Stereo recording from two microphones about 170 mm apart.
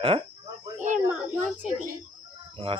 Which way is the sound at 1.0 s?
10° right (ahead or behind).